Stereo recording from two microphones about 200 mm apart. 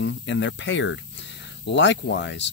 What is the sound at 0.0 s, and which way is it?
Speech, 65° left (ahead or behind).